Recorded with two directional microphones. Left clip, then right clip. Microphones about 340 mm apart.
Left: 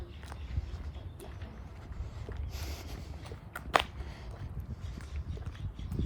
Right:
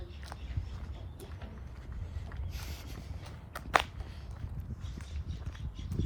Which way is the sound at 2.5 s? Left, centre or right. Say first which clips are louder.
Left 1 dB; centre.